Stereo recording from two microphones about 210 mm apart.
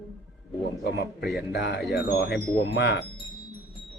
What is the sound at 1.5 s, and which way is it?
Speech, 55° left (ahead or behind).